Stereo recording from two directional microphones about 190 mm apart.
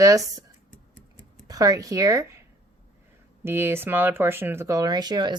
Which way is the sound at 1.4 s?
20° right (ahead or behind).